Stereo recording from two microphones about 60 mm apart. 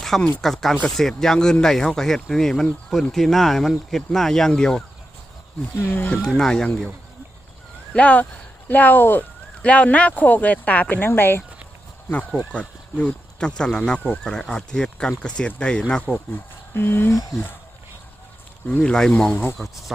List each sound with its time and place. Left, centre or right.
0.1 s speech: centre
5.8 s speech: left
6.1 s speech: centre
7.9 s speech: left
9.6 s speech: left
12.5 s speech: centre
16.7 s speech: left
18.8 s speech: centre